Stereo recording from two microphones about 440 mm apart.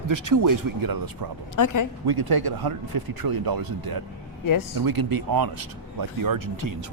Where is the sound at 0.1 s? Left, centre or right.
Right.